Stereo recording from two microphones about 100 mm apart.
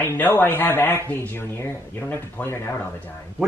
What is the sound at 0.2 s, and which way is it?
Speech, 20° left (ahead or behind).